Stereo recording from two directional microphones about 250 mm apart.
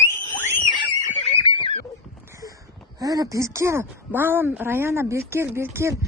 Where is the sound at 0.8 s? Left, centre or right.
Centre.